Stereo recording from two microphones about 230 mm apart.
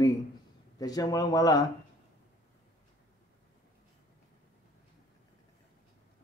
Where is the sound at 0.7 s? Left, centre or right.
Centre.